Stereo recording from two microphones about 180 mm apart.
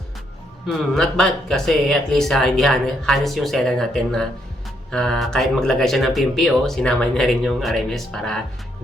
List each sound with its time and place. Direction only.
0.9 s speech: 5° left (ahead or behind)